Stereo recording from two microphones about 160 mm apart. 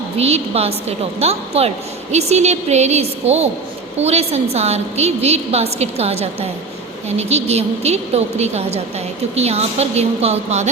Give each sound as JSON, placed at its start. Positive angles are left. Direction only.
{"t": 0.2, "sound": "a woman's voice", "side_deg": -40}